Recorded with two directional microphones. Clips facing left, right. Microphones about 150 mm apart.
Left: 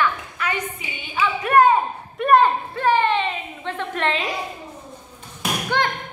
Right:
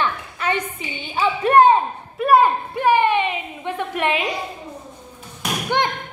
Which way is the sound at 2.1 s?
5° right (ahead or behind).